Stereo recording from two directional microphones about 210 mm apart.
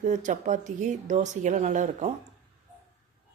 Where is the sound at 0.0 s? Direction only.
35° right (ahead or behind).